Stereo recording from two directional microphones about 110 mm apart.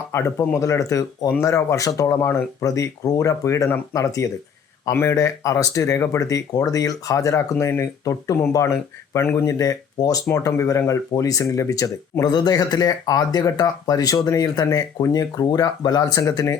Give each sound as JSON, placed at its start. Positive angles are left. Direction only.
{"t": 0.1, "sound": "speech", "side_deg": 25}